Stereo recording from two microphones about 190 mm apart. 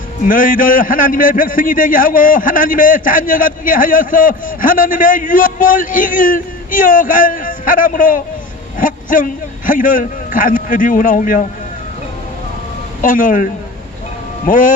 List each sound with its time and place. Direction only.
0.2 s a man's voice: 45° left (ahead or behind)
13.0 s a man's voice: 45° left (ahead or behind)